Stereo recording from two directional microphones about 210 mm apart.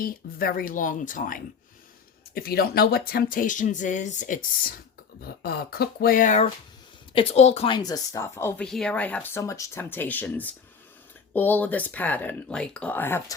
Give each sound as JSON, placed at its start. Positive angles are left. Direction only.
{"t": 0.0, "sound": "speech", "side_deg": 45}
{"t": 5.2, "sound": "speech", "side_deg": 45}
{"t": 7.8, "sound": "speech", "side_deg": 15}